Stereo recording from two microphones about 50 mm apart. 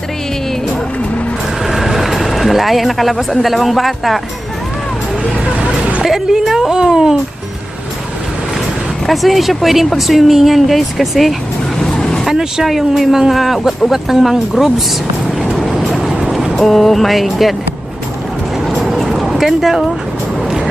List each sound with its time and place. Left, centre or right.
1.6 s speech: centre
5.5 s hubbub: right
6.0 s a woman's voice: centre
9.0 s speech: centre
11.8 s vehicle: centre
12.2 s speech: centre
15.5 s vehicle: centre
16.6 s speech: centre
18.6 s vehicle: centre